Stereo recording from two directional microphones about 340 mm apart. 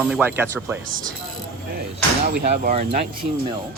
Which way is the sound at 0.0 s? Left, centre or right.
Centre.